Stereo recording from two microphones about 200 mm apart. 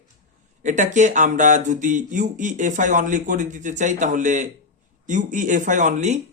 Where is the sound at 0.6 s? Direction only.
40° right (ahead or behind).